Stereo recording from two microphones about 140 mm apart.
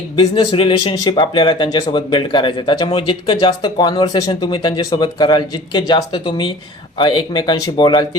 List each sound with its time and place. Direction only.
0.2 s speech: 40° left (ahead or behind)